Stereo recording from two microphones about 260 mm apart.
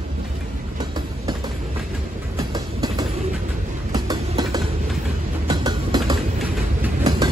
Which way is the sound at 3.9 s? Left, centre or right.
Centre.